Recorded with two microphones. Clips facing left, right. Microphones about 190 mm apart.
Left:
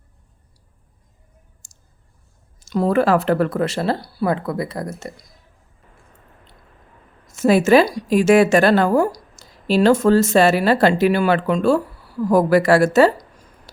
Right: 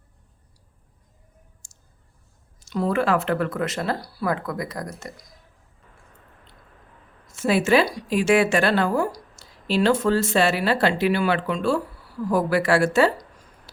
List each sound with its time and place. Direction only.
1.6 s clicking: 40° left (ahead or behind)
2.6 s speech: 40° left (ahead or behind)
7.3 s a woman's voice: 45° left (ahead or behind)